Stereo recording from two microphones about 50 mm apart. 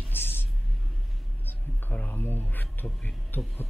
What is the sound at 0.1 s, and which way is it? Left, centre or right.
Vehicle, left.